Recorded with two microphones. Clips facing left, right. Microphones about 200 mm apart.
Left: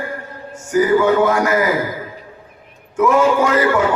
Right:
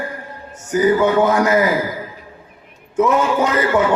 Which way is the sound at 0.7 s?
20° right (ahead or behind).